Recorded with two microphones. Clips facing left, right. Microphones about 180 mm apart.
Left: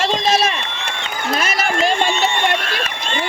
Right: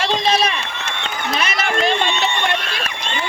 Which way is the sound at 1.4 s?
45° left (ahead or behind).